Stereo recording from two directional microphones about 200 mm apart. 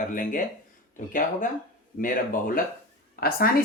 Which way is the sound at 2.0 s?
45° left (ahead or behind).